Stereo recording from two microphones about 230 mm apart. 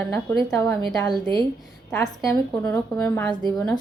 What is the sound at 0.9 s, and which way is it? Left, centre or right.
Speech, centre.